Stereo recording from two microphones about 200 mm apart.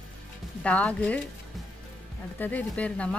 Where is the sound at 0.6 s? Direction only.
5° left (ahead or behind).